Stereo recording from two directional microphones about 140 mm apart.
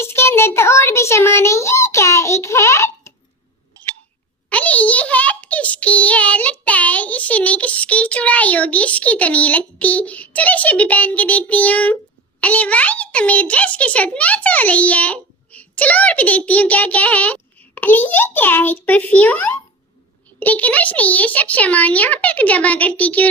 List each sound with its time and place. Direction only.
0.0 s a child's voice: 20° left (ahead or behind)
4.4 s a child's voice: 10° left (ahead or behind)